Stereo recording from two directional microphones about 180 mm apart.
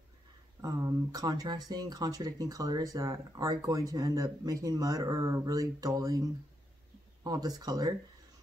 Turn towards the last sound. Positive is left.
turn(degrees=-20)  # may be behind; listen again after turning